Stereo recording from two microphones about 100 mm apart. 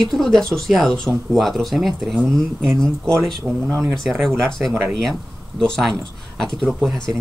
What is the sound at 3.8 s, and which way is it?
Speech, centre (ahead or behind).